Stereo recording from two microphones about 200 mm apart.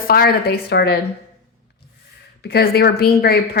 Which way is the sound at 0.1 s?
50° left (ahead or behind).